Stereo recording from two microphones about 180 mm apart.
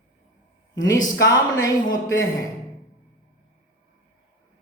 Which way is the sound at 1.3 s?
20° left (ahead or behind).